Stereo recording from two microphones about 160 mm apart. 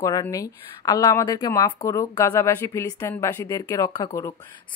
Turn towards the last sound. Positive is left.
turn(degrees=20)  # may be behind; listen again after turning